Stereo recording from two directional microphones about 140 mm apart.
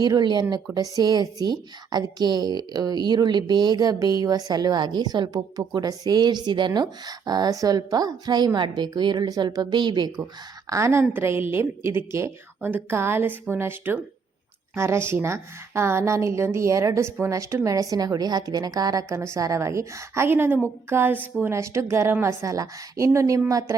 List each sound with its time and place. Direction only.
0.0 s a woman's voice: 30° right (ahead or behind)
10.7 s a woman's voice: 20° right (ahead or behind)